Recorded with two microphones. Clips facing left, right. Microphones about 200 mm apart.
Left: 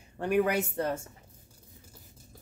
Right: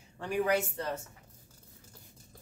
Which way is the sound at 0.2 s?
60° left (ahead or behind).